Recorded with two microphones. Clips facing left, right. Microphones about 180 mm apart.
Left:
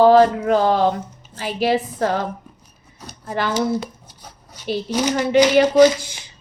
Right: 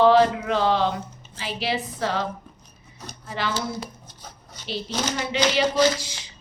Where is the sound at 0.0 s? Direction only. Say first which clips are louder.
Left 5 dB; 45° left (ahead or behind).